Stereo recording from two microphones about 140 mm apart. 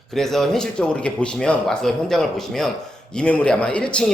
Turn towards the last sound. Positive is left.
turn(degrees=5)  # may be behind; listen again after turning